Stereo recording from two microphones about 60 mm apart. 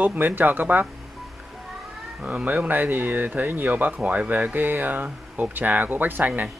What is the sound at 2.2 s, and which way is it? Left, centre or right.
Speech, right.